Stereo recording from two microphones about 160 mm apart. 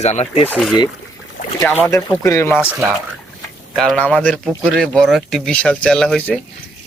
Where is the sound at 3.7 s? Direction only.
Centre (ahead or behind).